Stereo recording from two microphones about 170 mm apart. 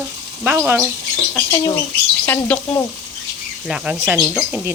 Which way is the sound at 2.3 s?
10° left (ahead or behind).